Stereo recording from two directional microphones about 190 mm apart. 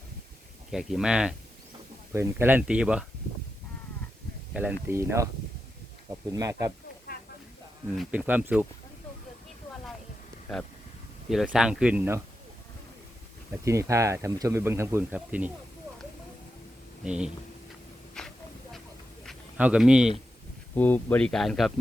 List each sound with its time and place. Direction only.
0.7 s speech: centre (ahead or behind)
4.5 s speech: 10° right (ahead or behind)
7.9 s speech: 10° right (ahead or behind)
11.3 s speech: centre (ahead or behind)
13.7 s speech: 15° right (ahead or behind)
17.0 s speech: 5° right (ahead or behind)
18.2 s hiss: 5° left (ahead or behind)
19.2 s a sound: 5° right (ahead or behind)
20.7 s speech: 10° left (ahead or behind)